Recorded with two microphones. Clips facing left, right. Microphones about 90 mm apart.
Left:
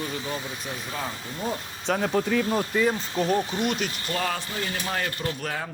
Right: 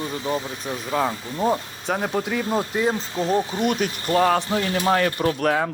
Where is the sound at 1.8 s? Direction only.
5° right (ahead or behind).